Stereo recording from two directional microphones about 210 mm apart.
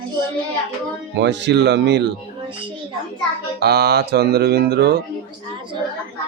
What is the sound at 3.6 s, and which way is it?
Speech, 50° right (ahead or behind).